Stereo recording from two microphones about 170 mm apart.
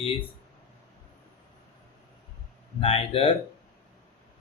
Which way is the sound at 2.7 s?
35° left (ahead or behind).